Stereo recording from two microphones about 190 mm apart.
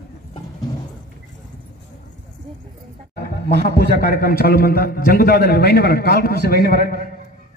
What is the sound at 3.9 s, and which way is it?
A man's voice, 50° left (ahead or behind).